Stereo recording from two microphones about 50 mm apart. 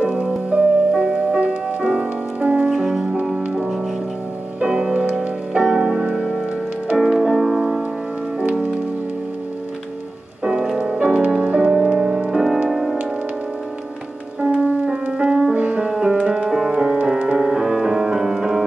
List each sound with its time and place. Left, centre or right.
0.0 s music: right
2.7 s music: centre
4.6 s music: centre
8.4 s music: right
10.4 s music: centre
14.4 s music: right
16.4 s music: centre